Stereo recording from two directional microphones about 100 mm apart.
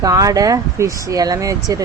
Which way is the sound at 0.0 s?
35° right (ahead or behind).